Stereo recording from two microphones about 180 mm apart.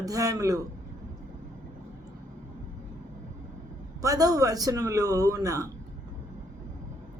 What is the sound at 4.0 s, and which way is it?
A man's voice, 20° right (ahead or behind).